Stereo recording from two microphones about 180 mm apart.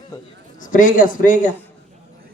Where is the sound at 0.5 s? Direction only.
45° left (ahead or behind).